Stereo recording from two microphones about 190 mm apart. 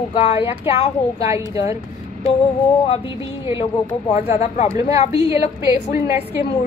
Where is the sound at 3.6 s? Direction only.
30° left (ahead or behind).